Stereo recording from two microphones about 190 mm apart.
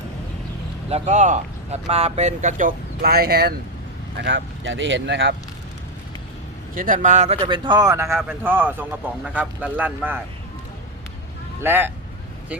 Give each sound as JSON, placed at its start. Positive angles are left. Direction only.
{"t": 0.9, "sound": "speech", "side_deg": -35}
{"t": 4.2, "sound": "speech", "side_deg": -75}
{"t": 6.7, "sound": "speech", "side_deg": -45}
{"t": 11.6, "sound": "speech", "side_deg": -10}